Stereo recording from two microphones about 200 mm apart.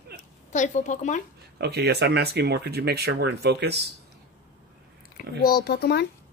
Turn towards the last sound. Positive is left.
turn(degrees=55)  # may be behind; listen again after turning